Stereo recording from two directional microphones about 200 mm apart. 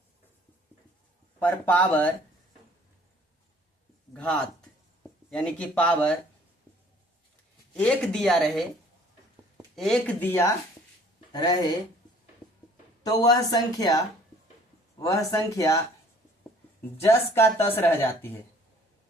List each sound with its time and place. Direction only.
1.4 s speech: 10° left (ahead or behind)
4.1 s speech: 5° left (ahead or behind)
7.7 s speech: 5° left (ahead or behind)
9.7 s speech: centre (ahead or behind); by 11.5 s 20° left (ahead or behind)
12.4 s a sound: 20° left (ahead or behind)
13.0 s speech: 20° left (ahead or behind)
17.0 s speech: 15° left (ahead or behind)